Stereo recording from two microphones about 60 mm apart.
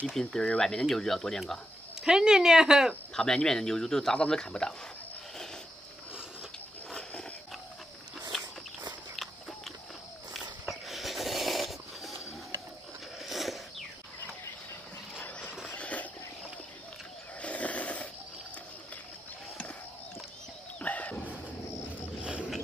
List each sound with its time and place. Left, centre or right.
0.1 s speech: centre
2.0 s speech: centre
3.2 s speech: centre
6.9 s wild animals: centre
8.3 s walk: centre
9.1 s biting: centre
10.7 s a sound: centre
15.7 s a sound: left
17.4 s wild animals: left
20.8 s wild animals: left